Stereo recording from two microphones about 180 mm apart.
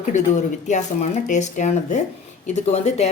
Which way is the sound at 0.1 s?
40° left (ahead or behind).